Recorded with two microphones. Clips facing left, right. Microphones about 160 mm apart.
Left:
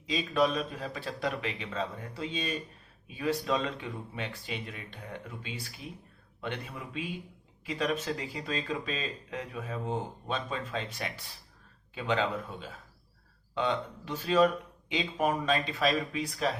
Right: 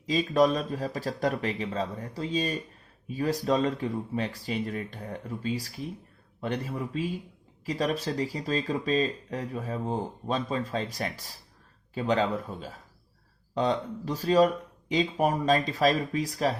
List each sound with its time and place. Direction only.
0.0 s speech: 40° right (ahead or behind)